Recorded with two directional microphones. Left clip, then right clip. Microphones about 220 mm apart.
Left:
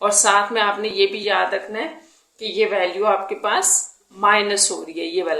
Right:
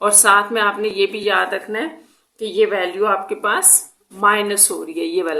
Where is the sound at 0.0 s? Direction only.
20° right (ahead or behind).